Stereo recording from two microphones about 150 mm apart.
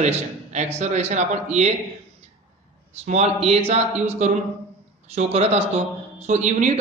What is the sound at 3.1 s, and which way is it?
A man's voice, 45° right (ahead or behind).